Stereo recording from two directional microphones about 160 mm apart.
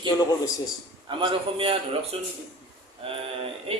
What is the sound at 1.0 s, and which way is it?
A man's voice, 30° right (ahead or behind).